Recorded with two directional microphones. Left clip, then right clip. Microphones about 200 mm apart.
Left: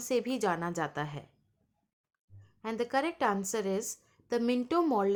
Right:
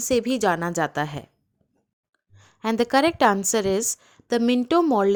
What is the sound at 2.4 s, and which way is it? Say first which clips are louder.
A woman's voice: right 11 dB; 45° right (ahead or behind).